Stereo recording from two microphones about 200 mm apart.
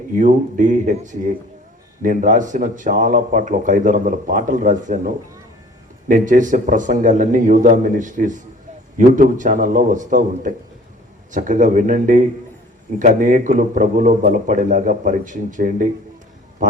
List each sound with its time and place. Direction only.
0.1 s a man's voice: 40° right (ahead or behind)